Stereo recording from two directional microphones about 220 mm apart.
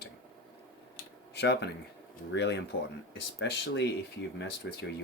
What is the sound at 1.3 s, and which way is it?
Speech, 50° left (ahead or behind).